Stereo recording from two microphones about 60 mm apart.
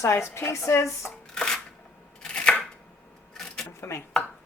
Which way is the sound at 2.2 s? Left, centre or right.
Centre.